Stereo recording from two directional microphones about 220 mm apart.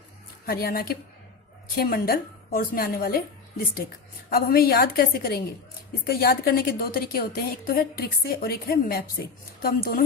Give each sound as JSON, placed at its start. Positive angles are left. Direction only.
{"t": 0.4, "sound": "a woman's voice", "side_deg": 45}
{"t": 4.3, "sound": "a woman's voice", "side_deg": 45}